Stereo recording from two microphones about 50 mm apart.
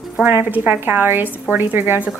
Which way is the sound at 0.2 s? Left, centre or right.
Right.